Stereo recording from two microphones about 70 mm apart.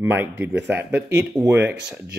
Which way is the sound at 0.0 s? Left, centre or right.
Right.